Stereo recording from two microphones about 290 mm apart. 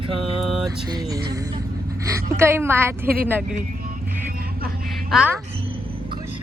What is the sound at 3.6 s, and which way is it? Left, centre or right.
Vehicle, right.